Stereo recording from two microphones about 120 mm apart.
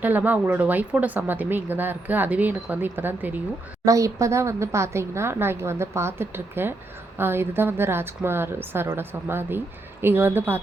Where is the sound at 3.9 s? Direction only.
25° right (ahead or behind).